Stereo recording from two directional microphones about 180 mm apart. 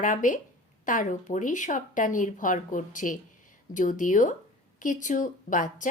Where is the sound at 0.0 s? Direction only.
45° left (ahead or behind).